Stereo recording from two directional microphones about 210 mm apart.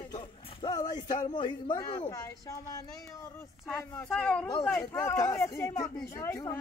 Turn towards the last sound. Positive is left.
turn(degrees=15)  # may be behind; listen again after turning